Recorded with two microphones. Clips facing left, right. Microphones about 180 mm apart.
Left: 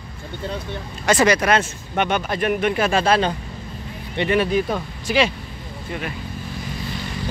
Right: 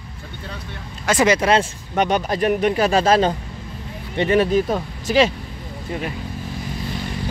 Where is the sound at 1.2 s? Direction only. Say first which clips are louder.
Right 4 dB; 25° right (ahead or behind); by 5.3 s 40° right (ahead or behind).